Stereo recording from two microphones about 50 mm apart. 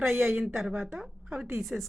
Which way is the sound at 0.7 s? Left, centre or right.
Right.